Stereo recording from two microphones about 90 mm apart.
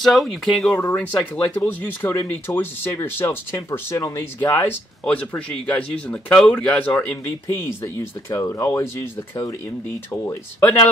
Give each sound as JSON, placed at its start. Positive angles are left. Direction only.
{"t": 0.0, "sound": "speech", "side_deg": 0}
{"t": 0.7, "sound": "speech", "side_deg": 15}
{"t": 5.0, "sound": "speech", "side_deg": 15}
{"t": 7.2, "sound": "speech", "side_deg": 30}
{"t": 10.2, "sound": "speech", "side_deg": 25}